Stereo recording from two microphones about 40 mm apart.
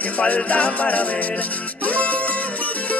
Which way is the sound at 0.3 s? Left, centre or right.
Left.